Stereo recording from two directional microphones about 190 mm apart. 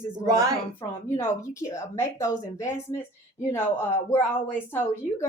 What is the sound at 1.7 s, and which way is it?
A woman's voice, 15° left (ahead or behind).